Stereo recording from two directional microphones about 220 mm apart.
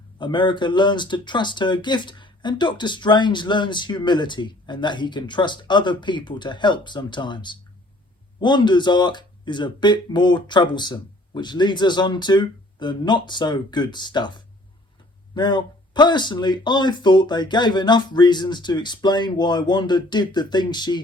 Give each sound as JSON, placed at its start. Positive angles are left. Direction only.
{"t": 0.2, "sound": "speech", "side_deg": 20}